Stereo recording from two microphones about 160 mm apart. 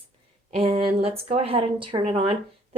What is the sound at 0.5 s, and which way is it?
Speech, 40° right (ahead or behind).